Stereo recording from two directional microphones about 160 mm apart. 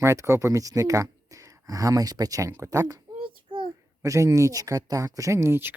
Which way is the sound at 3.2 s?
30° right (ahead or behind).